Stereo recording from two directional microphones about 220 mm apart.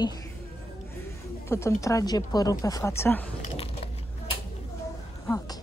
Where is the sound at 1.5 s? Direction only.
10° left (ahead or behind).